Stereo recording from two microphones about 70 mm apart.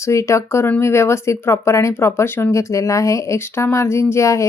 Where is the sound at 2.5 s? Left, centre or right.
Left.